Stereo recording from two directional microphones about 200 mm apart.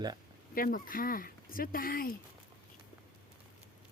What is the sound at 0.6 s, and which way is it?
Speech, 45° left (ahead or behind).